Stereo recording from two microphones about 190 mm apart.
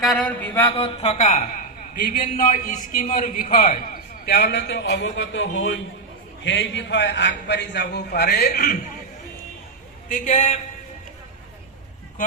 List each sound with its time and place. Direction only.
0.0 s mantra: 5° left (ahead or behind)
0.8 s a man's voice: 35° left (ahead or behind); by 8.8 s 55° left (ahead or behind)
10.1 s a man's voice: 45° left (ahead or behind)